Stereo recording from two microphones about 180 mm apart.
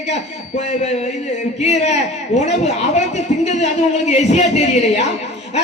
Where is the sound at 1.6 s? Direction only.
40° left (ahead or behind).